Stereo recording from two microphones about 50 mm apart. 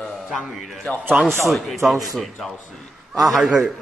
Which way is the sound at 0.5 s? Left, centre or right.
Centre.